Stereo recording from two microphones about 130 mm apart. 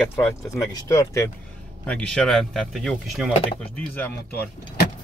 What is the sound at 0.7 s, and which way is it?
Speech, 30° left (ahead or behind).